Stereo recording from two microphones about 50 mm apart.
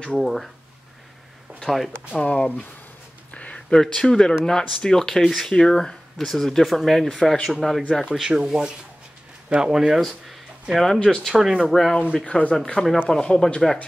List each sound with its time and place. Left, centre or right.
0.2 s speech: centre
1.6 s speech: centre
2.2 s speech: left
3.3 s a sound: left
3.7 s speech: centre
8.0 s speech: centre
10.8 s speech: centre
11.2 s speech: centre
11.6 s speech: centre
12.3 s speech: left
13.1 s speech: centre